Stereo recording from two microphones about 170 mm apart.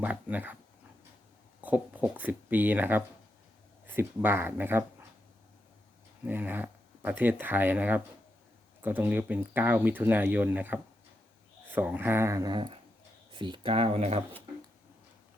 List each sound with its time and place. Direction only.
0.0 s speech: 10° right (ahead or behind)
1.6 s speech: 10° right (ahead or behind)
6.2 s speech: 10° right (ahead or behind); by 14.3 s 35° right (ahead or behind)